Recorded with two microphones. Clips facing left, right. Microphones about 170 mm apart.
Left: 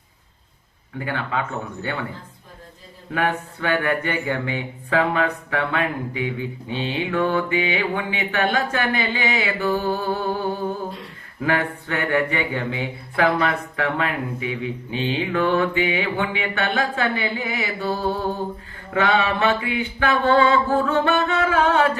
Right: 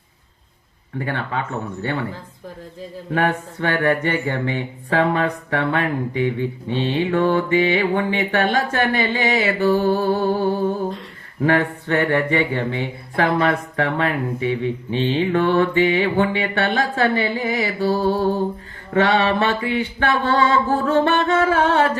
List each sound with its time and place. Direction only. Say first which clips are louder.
0.9 s speech: right 1 dB; 40° right (ahead or behind)
3.2 s speech: right 2 dB; 40° right (ahead or behind)
11.4 s speech: right 4 dB; 40° right (ahead or behind)